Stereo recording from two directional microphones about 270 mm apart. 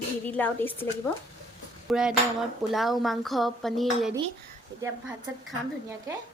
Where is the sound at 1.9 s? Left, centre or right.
Centre.